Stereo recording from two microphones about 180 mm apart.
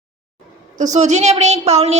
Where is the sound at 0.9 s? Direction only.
40° right (ahead or behind).